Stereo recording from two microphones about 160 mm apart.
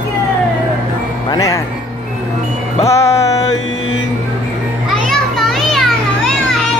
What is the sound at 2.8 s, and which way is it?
Music, 20° left (ahead or behind).